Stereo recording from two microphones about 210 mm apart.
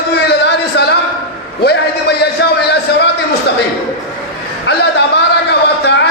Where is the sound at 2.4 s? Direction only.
55° left (ahead or behind).